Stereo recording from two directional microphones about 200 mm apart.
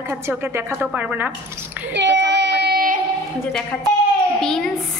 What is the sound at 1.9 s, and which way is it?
Child singing, 60° right (ahead or behind).